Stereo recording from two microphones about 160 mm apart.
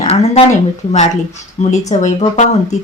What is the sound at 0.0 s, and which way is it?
Speech, 40° left (ahead or behind).